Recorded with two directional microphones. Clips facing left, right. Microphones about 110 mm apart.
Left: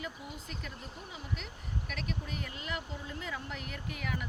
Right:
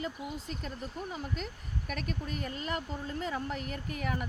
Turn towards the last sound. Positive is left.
turn(degrees=-40)  # may be behind; listen again after turning